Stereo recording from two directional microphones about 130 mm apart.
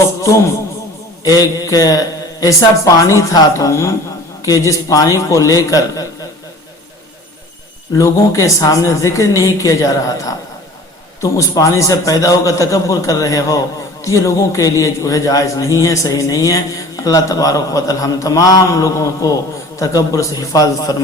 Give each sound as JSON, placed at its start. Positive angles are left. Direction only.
{"t": 0.0, "sound": "a sound", "side_deg": 25}
{"t": 1.2, "sound": "a man's voice", "side_deg": 25}
{"t": 7.9, "sound": "a man's voice", "side_deg": 25}